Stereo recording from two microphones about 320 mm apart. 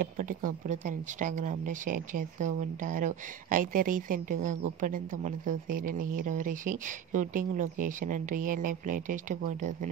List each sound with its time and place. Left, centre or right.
0.0 s speech: right